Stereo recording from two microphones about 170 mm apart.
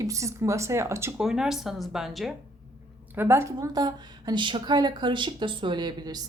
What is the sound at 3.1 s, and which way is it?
A woman's voice, 15° right (ahead or behind).